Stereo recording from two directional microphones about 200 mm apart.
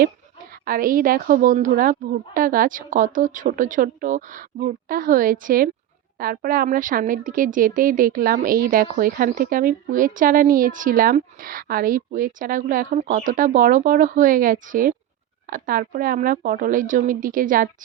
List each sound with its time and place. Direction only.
0.6 s a woman's voice: 45° right (ahead or behind)